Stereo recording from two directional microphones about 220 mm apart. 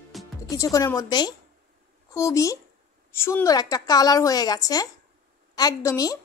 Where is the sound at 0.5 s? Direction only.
15° left (ahead or behind).